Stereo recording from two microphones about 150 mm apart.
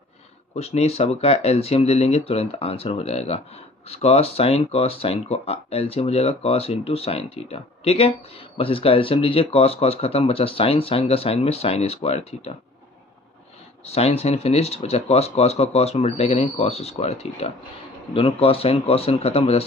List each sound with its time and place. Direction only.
0.6 s speech: 45° left (ahead or behind)
13.8 s speech: 45° left (ahead or behind)